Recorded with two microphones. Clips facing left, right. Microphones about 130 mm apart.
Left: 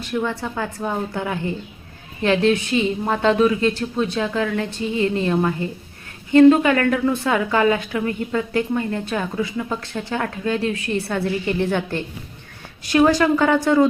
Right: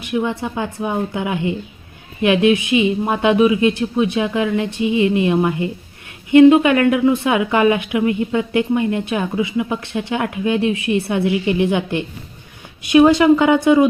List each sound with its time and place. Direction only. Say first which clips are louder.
0.0 s speech: right 3 dB; 15° right (ahead or behind)